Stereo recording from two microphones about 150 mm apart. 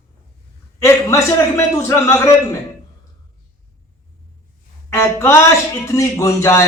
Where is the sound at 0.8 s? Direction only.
20° left (ahead or behind).